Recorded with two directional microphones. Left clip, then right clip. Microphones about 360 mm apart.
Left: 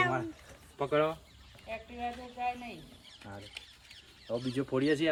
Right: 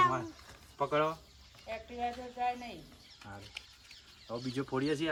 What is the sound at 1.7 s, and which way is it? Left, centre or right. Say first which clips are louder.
Speech: right 1 dB; right.